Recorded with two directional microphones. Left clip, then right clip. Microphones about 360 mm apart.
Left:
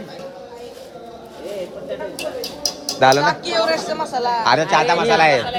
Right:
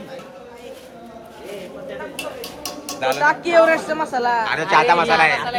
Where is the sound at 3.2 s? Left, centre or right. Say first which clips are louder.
Right 4 dB; centre.